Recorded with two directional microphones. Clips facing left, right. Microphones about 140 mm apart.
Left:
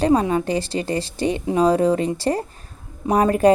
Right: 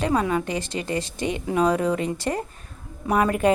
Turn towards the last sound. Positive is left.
turn(degrees=35)  # may be behind; listen again after turning